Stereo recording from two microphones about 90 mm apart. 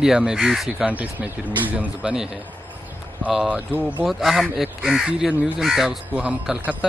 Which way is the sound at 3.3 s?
5° right (ahead or behind).